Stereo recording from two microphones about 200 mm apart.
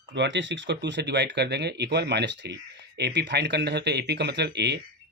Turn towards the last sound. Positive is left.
turn(degrees=-55)  # may be behind; listen again after turning